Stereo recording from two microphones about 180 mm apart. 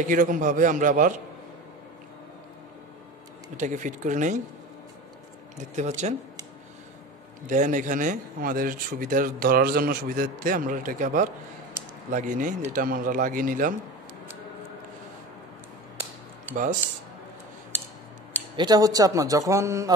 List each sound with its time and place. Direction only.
0.0 s speech: 45° right (ahead or behind)
3.5 s speech: 45° right (ahead or behind)
5.8 s speech: 40° right (ahead or behind)
7.4 s speech: 45° right (ahead or behind)
18.6 s speech: 20° right (ahead or behind)